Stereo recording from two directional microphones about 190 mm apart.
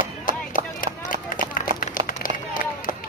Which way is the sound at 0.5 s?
45° left (ahead or behind).